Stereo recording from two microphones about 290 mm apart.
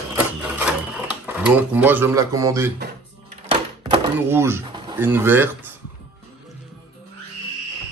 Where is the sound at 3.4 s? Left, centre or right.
Centre.